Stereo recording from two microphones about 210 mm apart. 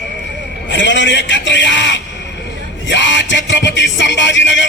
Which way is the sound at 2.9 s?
60° left (ahead or behind).